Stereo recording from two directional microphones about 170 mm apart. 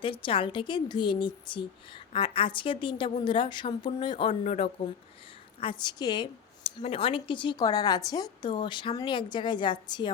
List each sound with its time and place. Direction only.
0.0 s a woman's voice: 30° left (ahead or behind)